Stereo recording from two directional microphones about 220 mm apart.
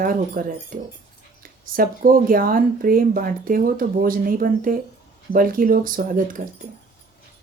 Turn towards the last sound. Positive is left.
turn(degrees=-40)  # may be behind; listen again after turning